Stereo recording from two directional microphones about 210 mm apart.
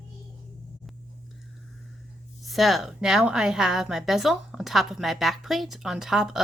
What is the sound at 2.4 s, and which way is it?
A woman's voice, centre (ahead or behind).